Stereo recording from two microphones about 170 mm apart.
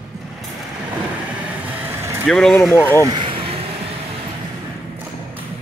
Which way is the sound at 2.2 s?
Centre (ahead or behind).